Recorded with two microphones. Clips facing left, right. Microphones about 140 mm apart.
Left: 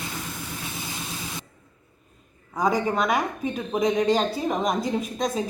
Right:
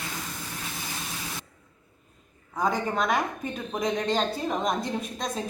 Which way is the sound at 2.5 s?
5° left (ahead or behind).